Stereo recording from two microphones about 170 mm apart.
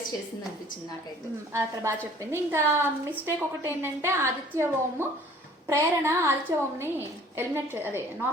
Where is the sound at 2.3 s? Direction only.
15° right (ahead or behind).